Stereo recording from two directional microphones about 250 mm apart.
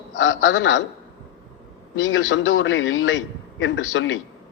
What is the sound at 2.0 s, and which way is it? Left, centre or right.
A man's voice, left.